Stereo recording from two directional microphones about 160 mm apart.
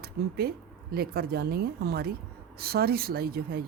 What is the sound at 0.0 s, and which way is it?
Speech, 75° right (ahead or behind).